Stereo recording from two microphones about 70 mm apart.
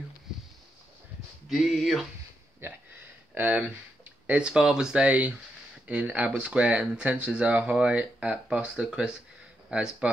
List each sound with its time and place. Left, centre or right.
1.5 s a sound: centre
2.6 s speech: right
3.3 s speech: right